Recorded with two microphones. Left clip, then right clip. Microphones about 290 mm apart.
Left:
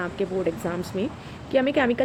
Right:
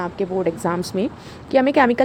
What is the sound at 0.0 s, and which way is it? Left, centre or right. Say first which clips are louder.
Speech: right 4 dB; right.